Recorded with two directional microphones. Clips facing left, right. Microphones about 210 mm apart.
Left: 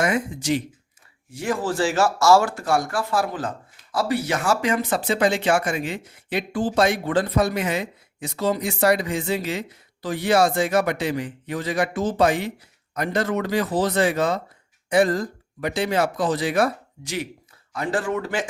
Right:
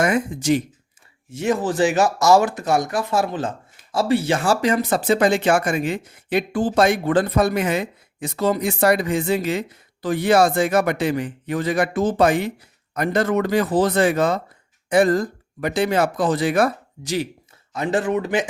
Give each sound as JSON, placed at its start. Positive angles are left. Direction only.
{"t": 0.0, "sound": "speech", "side_deg": -50}
{"t": 1.3, "sound": "speech", "side_deg": -20}
{"t": 17.7, "sound": "speech", "side_deg": -20}